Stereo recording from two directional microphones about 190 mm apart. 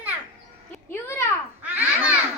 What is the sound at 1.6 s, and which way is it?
Babbling, 5° right (ahead or behind).